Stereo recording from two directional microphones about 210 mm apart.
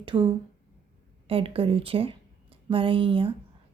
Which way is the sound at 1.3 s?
25° right (ahead or behind).